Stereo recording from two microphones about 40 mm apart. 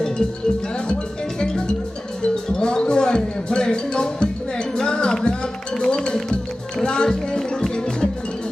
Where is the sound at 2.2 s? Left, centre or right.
Centre.